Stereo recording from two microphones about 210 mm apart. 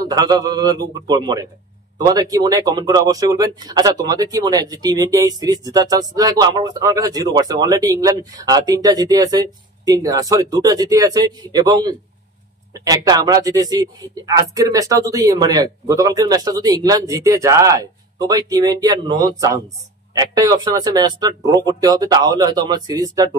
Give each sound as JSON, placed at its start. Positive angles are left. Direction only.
{"t": 0.0, "sound": "a man's voice", "side_deg": -15}